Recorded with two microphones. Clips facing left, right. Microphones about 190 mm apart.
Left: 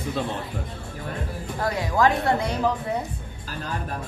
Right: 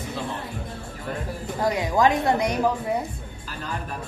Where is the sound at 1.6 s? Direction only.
15° right (ahead or behind).